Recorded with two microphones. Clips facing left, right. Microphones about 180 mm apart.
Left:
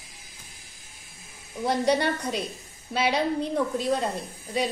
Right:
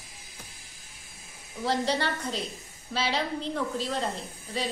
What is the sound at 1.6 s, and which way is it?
Speech, 15° left (ahead or behind).